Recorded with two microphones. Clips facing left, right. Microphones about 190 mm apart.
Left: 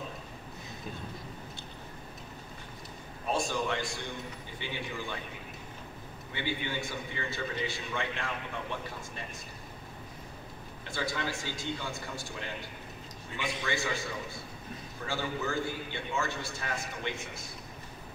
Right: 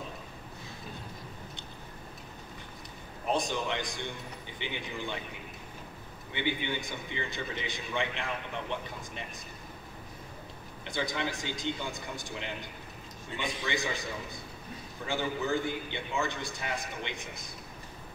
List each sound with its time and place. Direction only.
3.3 s a man's voice: 20° right (ahead or behind)
6.3 s a man's voice: 20° right (ahead or behind)
10.9 s a man's voice: 20° right (ahead or behind)
13.7 s a man's voice: 15° right (ahead or behind)